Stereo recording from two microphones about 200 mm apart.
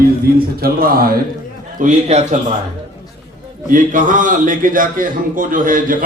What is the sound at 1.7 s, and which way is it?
Speech, 35° right (ahead or behind).